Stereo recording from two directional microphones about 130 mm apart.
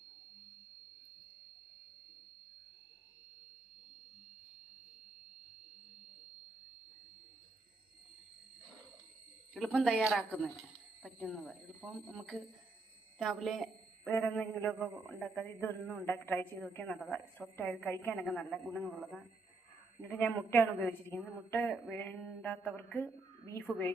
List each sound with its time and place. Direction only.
9.6 s a woman's voice: 5° left (ahead or behind)
14.1 s a man's voice: 10° left (ahead or behind)
20.0 s a man's voice: 15° left (ahead or behind)